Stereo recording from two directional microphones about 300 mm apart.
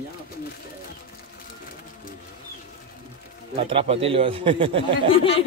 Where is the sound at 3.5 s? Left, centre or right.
Centre.